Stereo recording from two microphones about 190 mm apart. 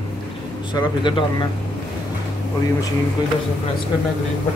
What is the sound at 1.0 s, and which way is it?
Speech, 25° left (ahead or behind).